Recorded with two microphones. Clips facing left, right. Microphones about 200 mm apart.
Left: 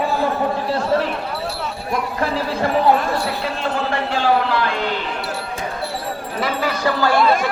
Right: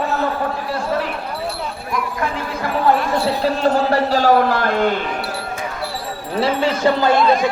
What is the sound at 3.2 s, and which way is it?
Speech, 40° right (ahead or behind).